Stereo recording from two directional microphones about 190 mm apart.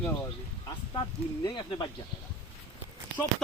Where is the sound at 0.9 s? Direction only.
25° left (ahead or behind).